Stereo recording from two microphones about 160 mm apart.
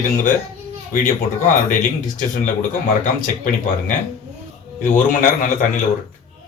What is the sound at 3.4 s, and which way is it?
A man's voice, 55° left (ahead or behind).